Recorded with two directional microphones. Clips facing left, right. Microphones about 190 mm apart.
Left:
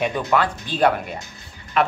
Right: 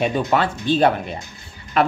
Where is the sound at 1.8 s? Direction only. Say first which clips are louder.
Right 2 dB; 35° right (ahead or behind).